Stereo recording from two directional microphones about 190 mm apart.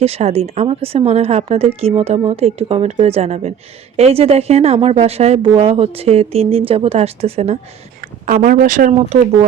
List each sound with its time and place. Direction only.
0.0 s a woman's voice: 35° right (ahead or behind)
8.3 s speech: 45° right (ahead or behind)